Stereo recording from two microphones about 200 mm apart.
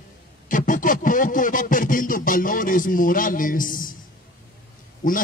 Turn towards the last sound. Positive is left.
turn(degrees=40)  # may be behind; listen again after turning